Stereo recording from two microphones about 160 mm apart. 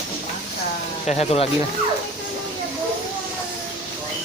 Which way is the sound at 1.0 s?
45° left (ahead or behind).